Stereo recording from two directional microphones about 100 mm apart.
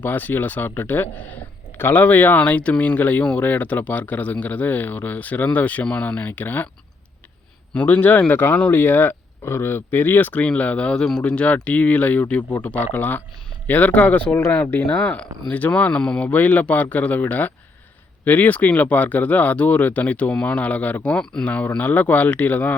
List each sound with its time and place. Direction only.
0.0 s speech: 20° left (ahead or behind)
7.7 s speech: 15° left (ahead or behind)